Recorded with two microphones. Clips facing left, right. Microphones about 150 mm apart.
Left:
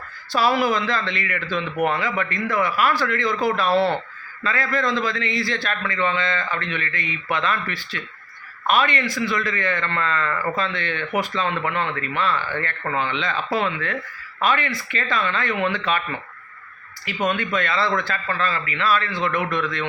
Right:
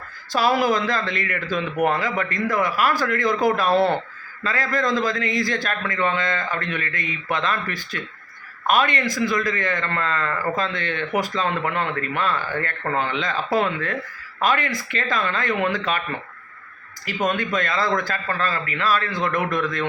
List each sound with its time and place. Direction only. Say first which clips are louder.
0.3 s a man's voice: even; 40° right (ahead or behind)
17.2 s a man's voice: even; 40° right (ahead or behind)